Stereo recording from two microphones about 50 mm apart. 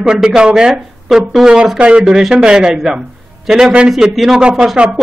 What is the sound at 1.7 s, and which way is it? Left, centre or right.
Speech, right.